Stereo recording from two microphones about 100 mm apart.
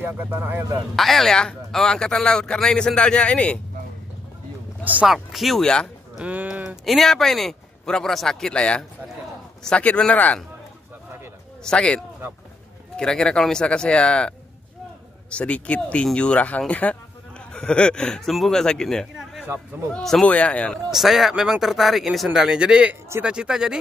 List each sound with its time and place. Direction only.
0.0 s speech: 20° right (ahead or behind)
0.9 s speech: centre (ahead or behind)
5.0 s speech: 5° right (ahead or behind)
6.1 s speech: 10° right (ahead or behind); by 10.4 s 15° left (ahead or behind)
11.6 s speech: 10° left (ahead or behind)
19.4 s speech: 20° right (ahead or behind)
19.9 s speech: 5° left (ahead or behind)
20.9 s speech: 5° right (ahead or behind)